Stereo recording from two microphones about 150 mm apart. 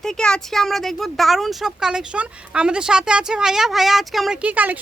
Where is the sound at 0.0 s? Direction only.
5° left (ahead or behind).